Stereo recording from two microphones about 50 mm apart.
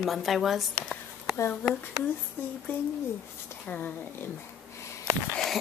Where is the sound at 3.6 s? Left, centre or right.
Left.